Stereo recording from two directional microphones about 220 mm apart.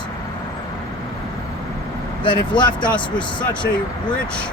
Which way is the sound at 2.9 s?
5° left (ahead or behind).